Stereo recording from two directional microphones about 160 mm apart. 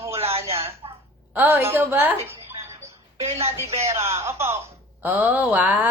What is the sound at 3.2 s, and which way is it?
Speech, 40° right (ahead or behind).